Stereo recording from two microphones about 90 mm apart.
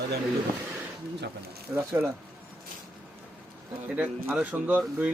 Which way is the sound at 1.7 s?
25° right (ahead or behind).